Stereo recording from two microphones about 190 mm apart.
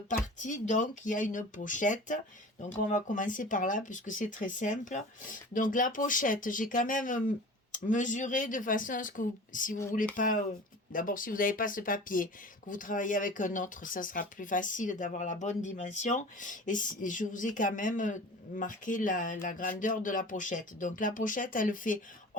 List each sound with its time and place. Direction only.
0.1 s speech: 40° left (ahead or behind)